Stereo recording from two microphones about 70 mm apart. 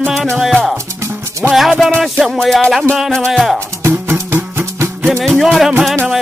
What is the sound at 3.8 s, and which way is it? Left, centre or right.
Music, right.